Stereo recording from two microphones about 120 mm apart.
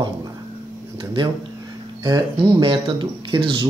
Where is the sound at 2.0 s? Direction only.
35° right (ahead or behind).